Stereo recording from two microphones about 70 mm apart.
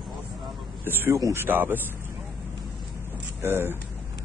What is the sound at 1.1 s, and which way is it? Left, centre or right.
Speech, right.